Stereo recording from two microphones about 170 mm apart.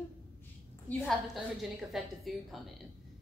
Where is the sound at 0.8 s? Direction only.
Centre (ahead or behind).